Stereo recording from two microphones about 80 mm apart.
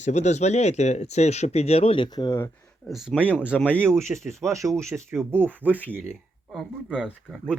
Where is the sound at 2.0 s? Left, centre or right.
Left.